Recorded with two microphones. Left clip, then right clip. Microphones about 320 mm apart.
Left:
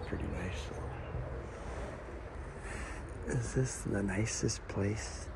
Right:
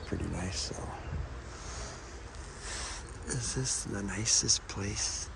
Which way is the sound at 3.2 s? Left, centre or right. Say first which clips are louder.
Even; centre.